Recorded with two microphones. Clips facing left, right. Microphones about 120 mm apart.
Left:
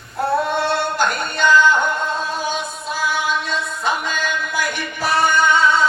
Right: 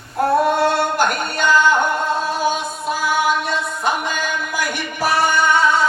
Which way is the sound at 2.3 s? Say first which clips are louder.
Right 4 dB; 45° right (ahead or behind).